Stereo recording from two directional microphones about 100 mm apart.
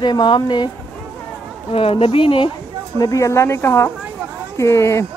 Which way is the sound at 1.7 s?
80° left.